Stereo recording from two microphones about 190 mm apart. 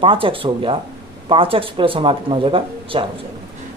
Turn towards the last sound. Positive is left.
turn(degrees=-25)  # may be behind; listen again after turning